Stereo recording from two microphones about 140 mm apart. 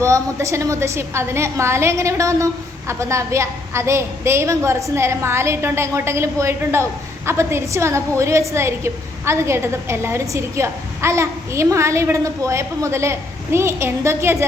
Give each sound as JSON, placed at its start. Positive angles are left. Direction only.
{"t": 0.0, "sound": "a woman's voice", "side_deg": -20}